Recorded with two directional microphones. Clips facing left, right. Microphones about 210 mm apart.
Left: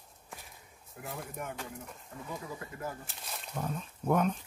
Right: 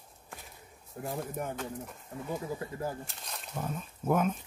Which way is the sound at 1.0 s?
35° right (ahead or behind).